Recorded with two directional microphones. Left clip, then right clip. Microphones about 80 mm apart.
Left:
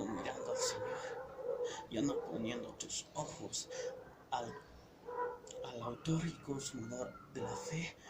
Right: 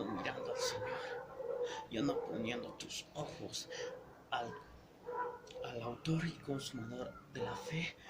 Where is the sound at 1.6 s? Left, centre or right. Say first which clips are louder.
Even; right.